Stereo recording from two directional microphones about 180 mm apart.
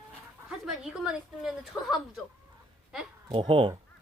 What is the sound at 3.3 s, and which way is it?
Speech, 30° right (ahead or behind).